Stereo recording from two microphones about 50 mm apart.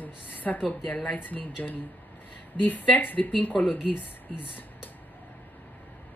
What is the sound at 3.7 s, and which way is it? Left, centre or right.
Speech, left.